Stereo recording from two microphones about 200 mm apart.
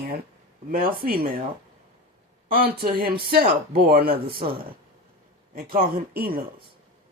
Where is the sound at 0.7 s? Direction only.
45° right (ahead or behind).